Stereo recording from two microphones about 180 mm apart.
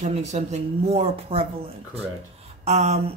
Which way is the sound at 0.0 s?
40° right (ahead or behind).